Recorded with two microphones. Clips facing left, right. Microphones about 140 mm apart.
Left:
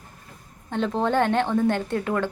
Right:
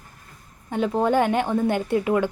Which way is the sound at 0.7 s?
10° right (ahead or behind).